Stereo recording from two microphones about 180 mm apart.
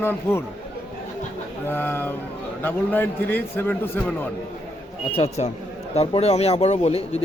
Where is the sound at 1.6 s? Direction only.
10° left (ahead or behind).